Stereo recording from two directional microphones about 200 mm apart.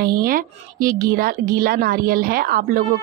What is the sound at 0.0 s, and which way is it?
A woman's voice, 45° right (ahead or behind).